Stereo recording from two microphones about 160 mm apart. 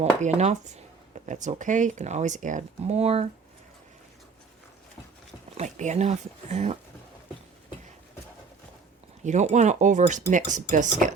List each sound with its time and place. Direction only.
0.0 s speech: 45° right (ahead or behind)
5.5 s speech: 50° right (ahead or behind)
9.2 s speech: 45° right (ahead or behind)